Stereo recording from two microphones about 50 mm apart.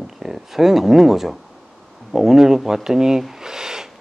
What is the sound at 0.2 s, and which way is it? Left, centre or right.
Speech, centre.